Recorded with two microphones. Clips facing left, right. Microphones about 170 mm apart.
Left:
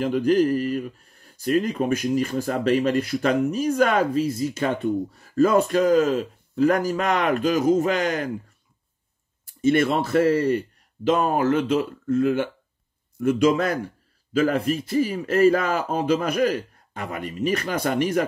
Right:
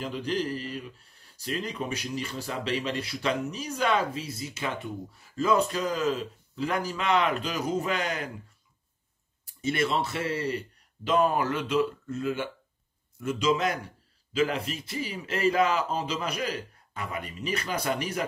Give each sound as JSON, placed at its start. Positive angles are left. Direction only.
{"t": 0.0, "sound": "a man's voice", "side_deg": 45}
{"t": 9.6, "sound": "a man's voice", "side_deg": 50}
{"t": 11.1, "sound": "a man's voice", "side_deg": 50}